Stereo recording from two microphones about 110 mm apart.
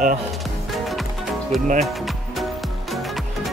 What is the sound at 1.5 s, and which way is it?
Speech, centre (ahead or behind).